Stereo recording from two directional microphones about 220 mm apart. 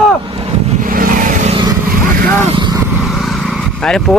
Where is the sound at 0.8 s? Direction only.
40° right (ahead or behind).